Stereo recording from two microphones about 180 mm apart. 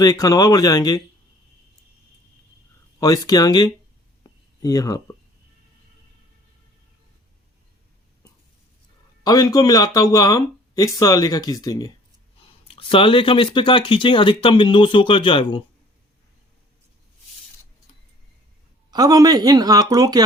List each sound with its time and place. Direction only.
0.0 s speech: 20° left (ahead or behind)
3.0 s speech: 20° left (ahead or behind)
4.2 s a sound: 20° left (ahead or behind)
9.2 s speech: 20° left (ahead or behind)
12.6 s speech: 30° left (ahead or behind)
18.9 s speech: 20° right (ahead or behind)